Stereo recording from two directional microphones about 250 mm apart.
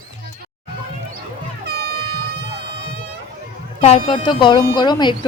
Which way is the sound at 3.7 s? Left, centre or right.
Left.